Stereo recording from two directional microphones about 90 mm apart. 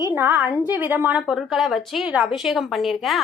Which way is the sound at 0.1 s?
20° right (ahead or behind).